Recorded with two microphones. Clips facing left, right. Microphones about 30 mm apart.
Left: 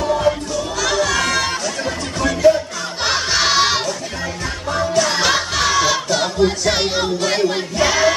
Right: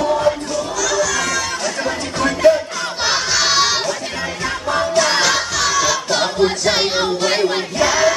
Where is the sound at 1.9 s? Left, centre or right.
Right.